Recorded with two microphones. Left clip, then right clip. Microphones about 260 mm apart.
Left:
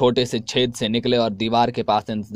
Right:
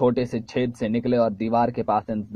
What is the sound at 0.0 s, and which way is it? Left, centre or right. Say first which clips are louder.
Speech: left 3 dB; left.